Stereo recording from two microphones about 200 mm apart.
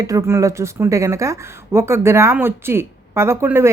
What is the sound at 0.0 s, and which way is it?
Speech, 15° right (ahead or behind).